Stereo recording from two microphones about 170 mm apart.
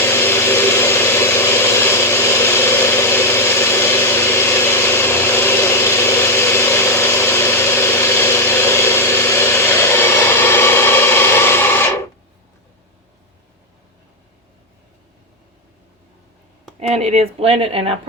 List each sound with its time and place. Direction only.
0.0 s vehicle: 15° left (ahead or behind)
16.8 s speech: 40° right (ahead or behind)